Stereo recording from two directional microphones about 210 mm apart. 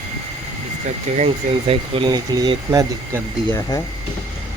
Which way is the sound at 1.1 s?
30° right (ahead or behind).